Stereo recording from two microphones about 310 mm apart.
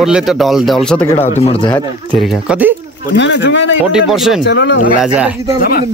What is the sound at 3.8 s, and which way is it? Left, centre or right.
Speech, centre.